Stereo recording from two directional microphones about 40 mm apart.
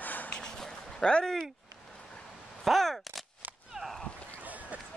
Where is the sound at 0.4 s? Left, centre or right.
Centre.